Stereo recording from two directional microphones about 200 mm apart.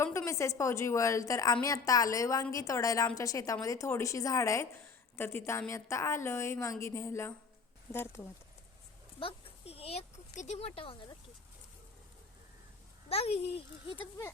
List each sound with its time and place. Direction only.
0.0 s speech: 15° left (ahead or behind)
9.2 s speech: 30° left (ahead or behind)
13.1 s speech: 30° left (ahead or behind)